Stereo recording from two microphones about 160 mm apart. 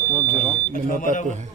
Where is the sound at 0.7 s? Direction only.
60° left (ahead or behind).